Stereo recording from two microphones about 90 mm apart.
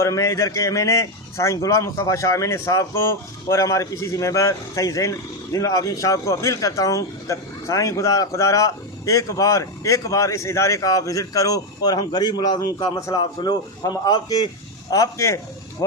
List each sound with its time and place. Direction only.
0.0 s a man's voice: 35° left (ahead or behind)